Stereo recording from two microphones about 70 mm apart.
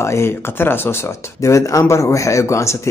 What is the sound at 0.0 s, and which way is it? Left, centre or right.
Speech, left.